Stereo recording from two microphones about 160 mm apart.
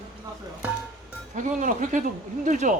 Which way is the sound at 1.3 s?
50° right (ahead or behind).